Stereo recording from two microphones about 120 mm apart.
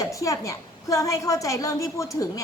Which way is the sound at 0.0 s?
25° left (ahead or behind).